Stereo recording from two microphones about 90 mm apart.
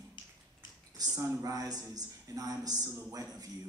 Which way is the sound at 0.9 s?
45° right (ahead or behind).